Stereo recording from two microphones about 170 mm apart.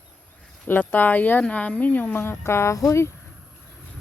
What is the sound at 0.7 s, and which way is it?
Speech, 10° left (ahead or behind).